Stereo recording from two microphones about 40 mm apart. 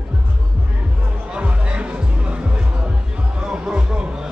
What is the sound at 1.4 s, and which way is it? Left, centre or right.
Music, right.